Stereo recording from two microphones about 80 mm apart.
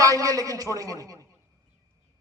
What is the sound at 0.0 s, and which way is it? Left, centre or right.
A man's voice, right.